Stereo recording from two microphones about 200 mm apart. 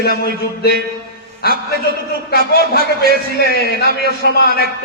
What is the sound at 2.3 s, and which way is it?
Speech, 50° left (ahead or behind).